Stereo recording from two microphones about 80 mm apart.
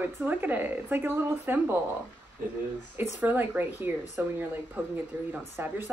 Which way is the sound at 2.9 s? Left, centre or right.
Right.